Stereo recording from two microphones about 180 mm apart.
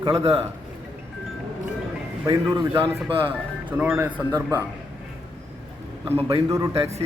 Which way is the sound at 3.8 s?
10° right (ahead or behind).